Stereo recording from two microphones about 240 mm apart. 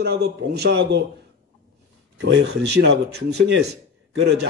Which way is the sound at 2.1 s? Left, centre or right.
Right.